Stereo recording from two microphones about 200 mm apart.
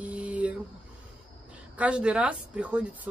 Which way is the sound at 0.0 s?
5° right (ahead or behind).